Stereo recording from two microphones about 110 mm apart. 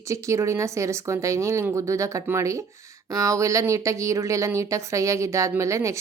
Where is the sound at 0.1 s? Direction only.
25° right (ahead or behind).